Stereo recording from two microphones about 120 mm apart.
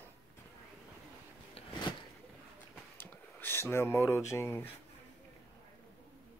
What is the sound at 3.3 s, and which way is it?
Speech, 15° left (ahead or behind).